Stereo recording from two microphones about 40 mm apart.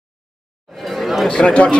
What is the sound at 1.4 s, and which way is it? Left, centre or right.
Speech, left.